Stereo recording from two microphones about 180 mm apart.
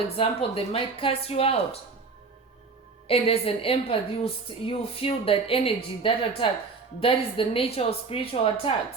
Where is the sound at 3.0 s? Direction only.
35° left (ahead or behind).